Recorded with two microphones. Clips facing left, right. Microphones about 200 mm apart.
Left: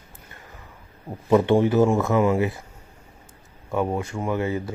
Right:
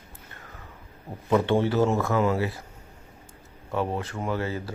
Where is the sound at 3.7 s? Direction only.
10° left (ahead or behind).